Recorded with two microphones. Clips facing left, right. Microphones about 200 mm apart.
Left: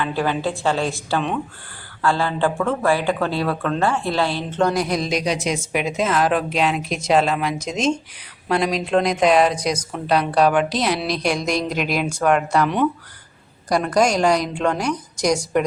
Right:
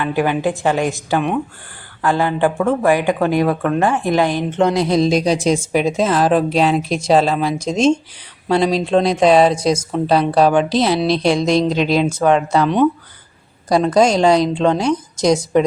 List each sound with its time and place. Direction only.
0.0 s a woman's voice: 15° right (ahead or behind)